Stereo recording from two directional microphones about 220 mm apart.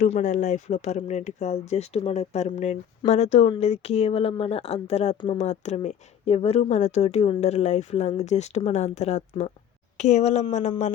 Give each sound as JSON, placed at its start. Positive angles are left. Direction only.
{"t": 0.0, "sound": "speech", "side_deg": 35}